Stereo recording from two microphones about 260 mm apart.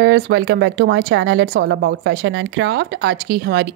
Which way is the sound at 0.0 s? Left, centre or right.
Right.